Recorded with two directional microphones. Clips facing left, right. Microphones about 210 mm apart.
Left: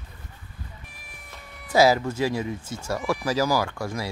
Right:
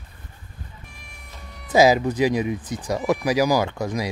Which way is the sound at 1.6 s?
20° right (ahead or behind).